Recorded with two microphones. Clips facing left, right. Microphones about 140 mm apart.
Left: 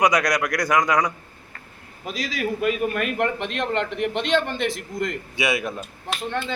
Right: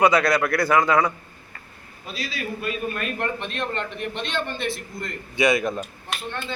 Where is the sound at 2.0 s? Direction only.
80° left.